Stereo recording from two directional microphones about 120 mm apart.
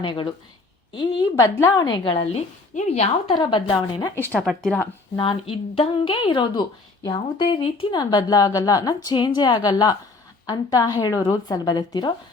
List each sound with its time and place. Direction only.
0.0 s a woman's voice: 40° left (ahead or behind)
1.4 s a woman's voice: 25° left (ahead or behind)
1.9 s a woman's voice: 50° left (ahead or behind)
2.7 s speech: 60° left (ahead or behind)
3.3 s a woman's voice: 40° left (ahead or behind)
4.4 s speech: centre (ahead or behind)
5.1 s a woman's voice: 45° left (ahead or behind)
7.9 s a woman's voice: 35° left (ahead or behind)